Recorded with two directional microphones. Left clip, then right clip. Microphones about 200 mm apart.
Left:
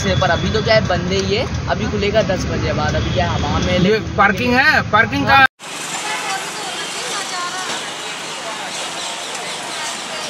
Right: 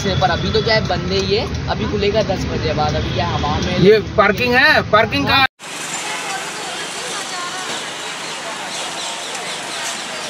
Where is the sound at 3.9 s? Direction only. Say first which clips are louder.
Right 1 dB; 30° right (ahead or behind).